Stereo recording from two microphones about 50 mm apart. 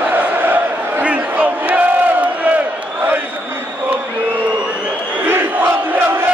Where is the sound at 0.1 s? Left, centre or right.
Right.